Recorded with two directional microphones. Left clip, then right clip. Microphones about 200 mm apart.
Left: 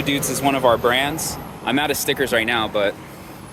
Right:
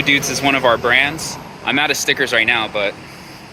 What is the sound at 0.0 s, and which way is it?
Speech, 10° left (ahead or behind).